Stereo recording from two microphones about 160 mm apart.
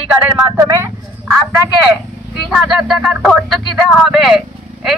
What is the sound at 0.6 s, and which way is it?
Speech, 20° right (ahead or behind).